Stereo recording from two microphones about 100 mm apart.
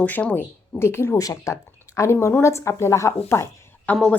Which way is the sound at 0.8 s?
25° left (ahead or behind).